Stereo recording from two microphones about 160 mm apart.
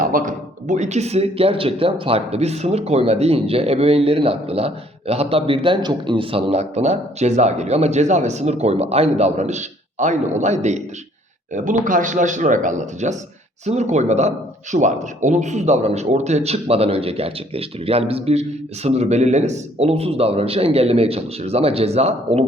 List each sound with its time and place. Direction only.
0.0 s speech: 55° right (ahead or behind); by 22.4 s 40° right (ahead or behind)